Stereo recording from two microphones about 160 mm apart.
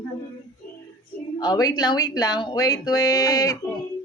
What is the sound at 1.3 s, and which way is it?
Speech, 25° left (ahead or behind).